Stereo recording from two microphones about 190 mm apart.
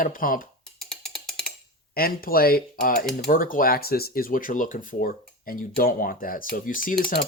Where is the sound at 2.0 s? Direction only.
50° left (ahead or behind).